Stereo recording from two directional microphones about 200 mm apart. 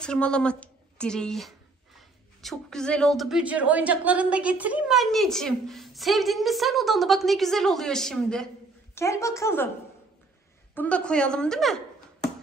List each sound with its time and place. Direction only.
0.0 s a woman's voice: 5° left (ahead or behind)
8.9 s a woman's voice: 15° left (ahead or behind)
10.7 s a woman's voice: 5° left (ahead or behind)